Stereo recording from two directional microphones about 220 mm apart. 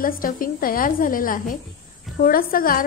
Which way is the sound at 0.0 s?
40° left (ahead or behind).